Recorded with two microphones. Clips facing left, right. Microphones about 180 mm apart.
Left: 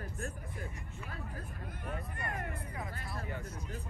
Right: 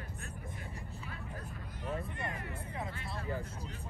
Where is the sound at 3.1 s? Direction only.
30° right (ahead or behind).